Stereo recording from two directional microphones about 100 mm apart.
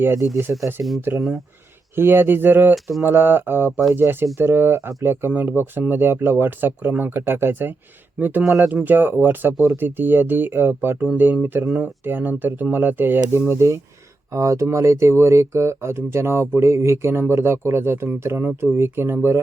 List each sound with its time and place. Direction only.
0.5 s speech: 20° right (ahead or behind)
2.0 s speech: 20° right (ahead or behind)
2.7 s mantra: centre (ahead or behind)
3.0 s speech: 20° right (ahead or behind)